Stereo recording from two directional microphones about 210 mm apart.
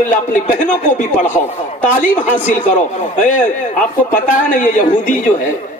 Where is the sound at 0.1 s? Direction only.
35° left (ahead or behind).